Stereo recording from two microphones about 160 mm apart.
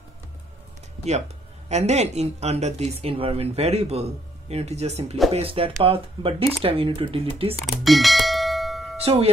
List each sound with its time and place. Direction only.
1.7 s speech: 45° right (ahead or behind)
7.6 s bell: centre (ahead or behind)
9.0 s speech: 40° right (ahead or behind)